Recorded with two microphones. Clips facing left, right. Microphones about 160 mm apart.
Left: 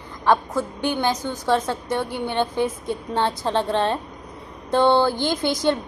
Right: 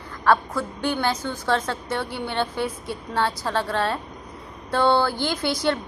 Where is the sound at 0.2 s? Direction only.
15° left (ahead or behind).